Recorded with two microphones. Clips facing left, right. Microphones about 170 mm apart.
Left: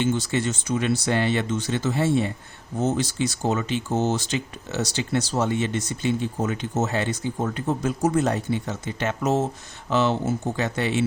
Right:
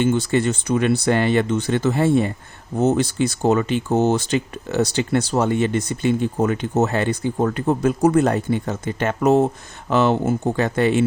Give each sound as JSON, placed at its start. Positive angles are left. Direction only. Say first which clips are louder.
{"t": 0.0, "sound": "speech", "louder": "right 5 dB", "side_deg": -55}